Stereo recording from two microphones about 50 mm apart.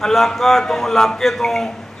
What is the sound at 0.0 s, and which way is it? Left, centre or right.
A man's voice, centre.